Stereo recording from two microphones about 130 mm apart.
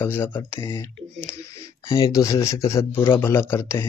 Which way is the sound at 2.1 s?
25° left (ahead or behind).